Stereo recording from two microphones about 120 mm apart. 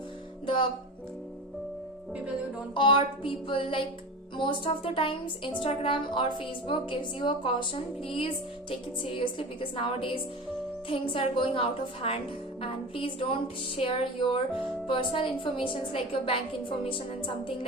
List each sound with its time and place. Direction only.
0.4 s music: 45° left (ahead or behind)
2.7 s speech: 45° left (ahead or behind)